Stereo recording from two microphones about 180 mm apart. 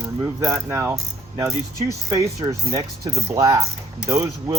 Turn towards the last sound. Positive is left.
turn(degrees=-15)  # may be behind; listen again after turning